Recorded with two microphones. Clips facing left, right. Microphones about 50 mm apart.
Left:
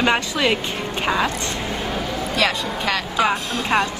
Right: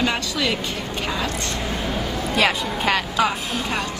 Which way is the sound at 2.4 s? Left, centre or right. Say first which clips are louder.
Right 1 dB; centre.